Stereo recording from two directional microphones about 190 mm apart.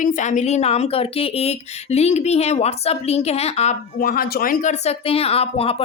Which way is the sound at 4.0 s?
50° left (ahead or behind).